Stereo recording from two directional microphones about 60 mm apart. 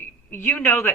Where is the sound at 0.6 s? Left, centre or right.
Left.